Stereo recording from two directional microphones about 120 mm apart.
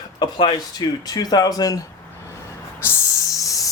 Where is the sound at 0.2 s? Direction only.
40° left (ahead or behind).